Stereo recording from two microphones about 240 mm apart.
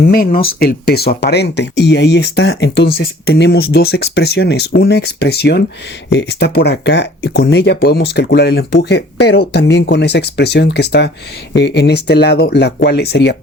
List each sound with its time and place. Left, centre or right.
0.0 s speech: left